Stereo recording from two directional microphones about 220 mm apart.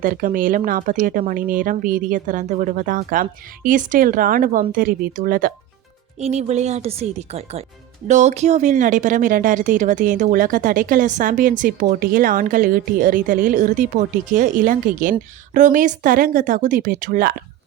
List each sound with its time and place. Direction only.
0.0 s a woman's voice: 40° right (ahead or behind)
6.1 s a woman's voice: 30° right (ahead or behind)